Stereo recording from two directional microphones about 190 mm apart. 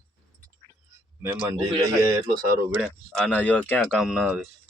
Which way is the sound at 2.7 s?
Centre (ahead or behind).